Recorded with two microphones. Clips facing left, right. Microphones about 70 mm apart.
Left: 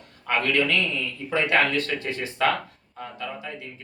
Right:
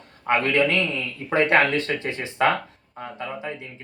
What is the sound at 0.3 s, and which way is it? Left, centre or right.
Speech, right.